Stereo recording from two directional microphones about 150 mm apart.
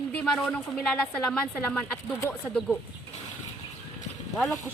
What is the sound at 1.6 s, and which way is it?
Speech, 15° left (ahead or behind).